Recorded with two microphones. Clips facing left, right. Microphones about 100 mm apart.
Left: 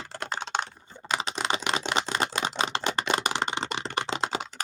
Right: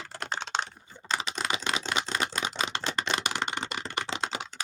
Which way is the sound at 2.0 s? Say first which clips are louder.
Left 3 dB; 30° left (ahead or behind).